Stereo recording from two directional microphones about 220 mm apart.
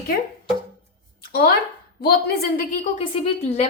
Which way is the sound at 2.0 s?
45° left (ahead or behind).